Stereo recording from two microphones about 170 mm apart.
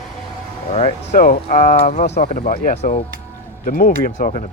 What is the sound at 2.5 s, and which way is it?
Speech, 60° left (ahead or behind).